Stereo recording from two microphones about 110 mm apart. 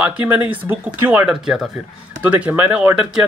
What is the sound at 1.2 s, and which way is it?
Speech, 5° right (ahead or behind).